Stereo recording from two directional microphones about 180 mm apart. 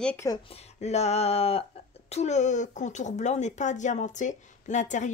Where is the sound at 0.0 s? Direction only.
10° left (ahead or behind).